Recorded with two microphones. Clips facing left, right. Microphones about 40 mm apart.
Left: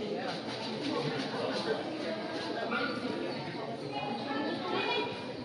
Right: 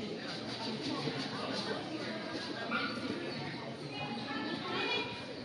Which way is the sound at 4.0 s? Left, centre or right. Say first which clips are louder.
Left 4 dB; centre.